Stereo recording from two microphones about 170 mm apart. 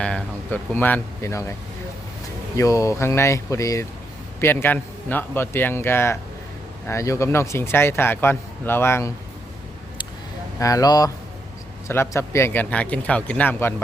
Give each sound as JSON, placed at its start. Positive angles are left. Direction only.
{"t": 0.0, "sound": "speech", "side_deg": 5}
{"t": 2.6, "sound": "a man's voice", "side_deg": 20}
{"t": 10.6, "sound": "a man's voice", "side_deg": 20}